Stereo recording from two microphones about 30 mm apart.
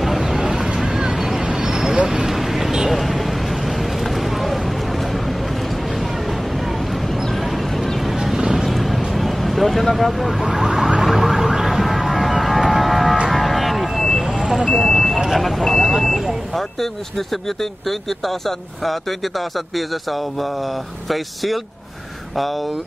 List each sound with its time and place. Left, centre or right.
0.2 s vehicle: centre
1.4 s vehicle: right
2.0 s a sound: centre
2.9 s vehicle: centre
4.0 s a sound: centre
7.7 s a sound: centre
8.2 s vehicle: centre
8.6 s a sound: centre
9.9 s speech: centre
10.4 s car alarm: centre
13.3 s vehicle: centre
15.1 s vehicle: centre
16.5 s speech: centre